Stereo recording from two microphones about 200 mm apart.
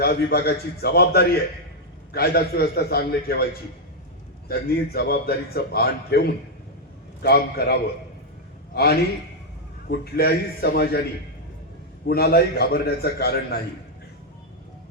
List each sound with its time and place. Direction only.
0.0 s a man's voice: 50° left (ahead or behind)
4.9 s a man's voice: 50° left (ahead or behind)
12.0 s a man's voice: 50° left (ahead or behind)